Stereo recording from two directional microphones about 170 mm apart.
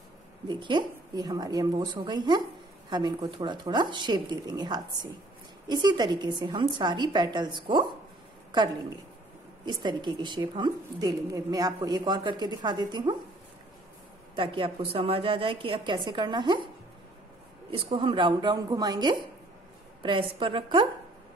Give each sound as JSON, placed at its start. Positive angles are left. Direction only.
{"t": 0.5, "sound": "a woman's voice", "side_deg": -25}
{"t": 9.7, "sound": "a woman's voice", "side_deg": -25}
{"t": 14.3, "sound": "a woman's voice", "side_deg": -30}
{"t": 17.6, "sound": "a woman's voice", "side_deg": -35}